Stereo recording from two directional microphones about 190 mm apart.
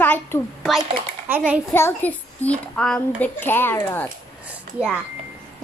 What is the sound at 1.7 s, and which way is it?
A child's voice, 10° left (ahead or behind).